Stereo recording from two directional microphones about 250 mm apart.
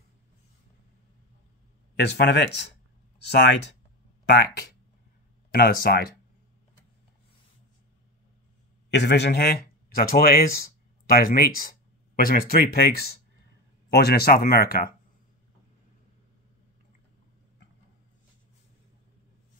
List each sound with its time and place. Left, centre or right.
2.0 s speech: left
8.9 s speech: left